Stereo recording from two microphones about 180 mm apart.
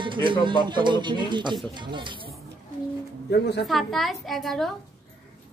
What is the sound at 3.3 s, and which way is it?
Speech, 65° left (ahead or behind).